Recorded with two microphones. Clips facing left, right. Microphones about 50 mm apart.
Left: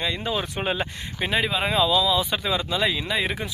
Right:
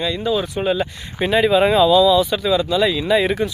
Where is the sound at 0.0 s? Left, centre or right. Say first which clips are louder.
Right 6 dB; left.